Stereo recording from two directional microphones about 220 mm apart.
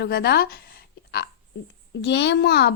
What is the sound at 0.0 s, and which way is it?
Speech, 45° left (ahead or behind).